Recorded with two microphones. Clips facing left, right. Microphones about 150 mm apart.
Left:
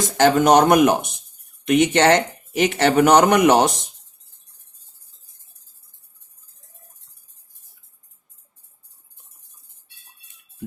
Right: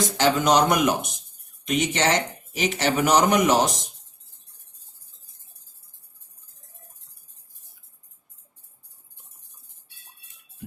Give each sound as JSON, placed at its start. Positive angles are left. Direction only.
{"t": 0.2, "sound": "speech", "side_deg": 50}